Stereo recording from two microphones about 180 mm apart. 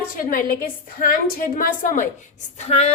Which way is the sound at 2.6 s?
35° left (ahead or behind).